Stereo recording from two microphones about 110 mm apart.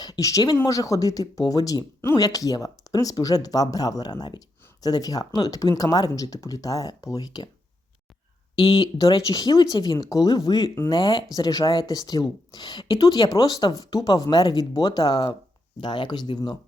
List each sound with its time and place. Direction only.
0.0 s speech: 35° left (ahead or behind)
9.1 s speech: 35° left (ahead or behind)